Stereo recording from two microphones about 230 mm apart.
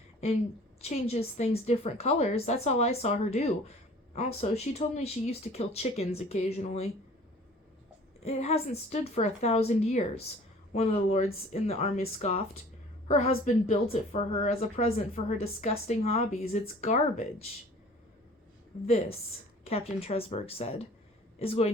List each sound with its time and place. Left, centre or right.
0.8 s a woman's voice: left
8.2 s a woman's voice: left
18.7 s a woman's voice: left